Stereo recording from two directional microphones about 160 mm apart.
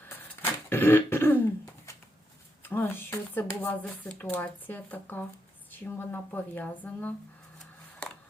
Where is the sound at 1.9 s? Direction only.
20° left (ahead or behind).